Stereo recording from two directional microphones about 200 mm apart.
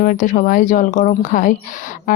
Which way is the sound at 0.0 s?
40° left (ahead or behind).